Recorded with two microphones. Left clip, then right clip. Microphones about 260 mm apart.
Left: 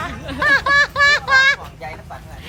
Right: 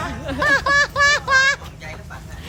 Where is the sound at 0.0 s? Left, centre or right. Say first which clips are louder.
Left 1 dB; centre.